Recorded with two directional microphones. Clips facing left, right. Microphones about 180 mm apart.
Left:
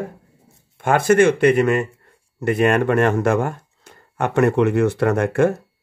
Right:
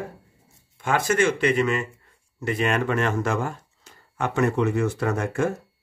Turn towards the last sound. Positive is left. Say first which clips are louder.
# left 7 dB
turn(degrees=65)  # may be behind; listen again after turning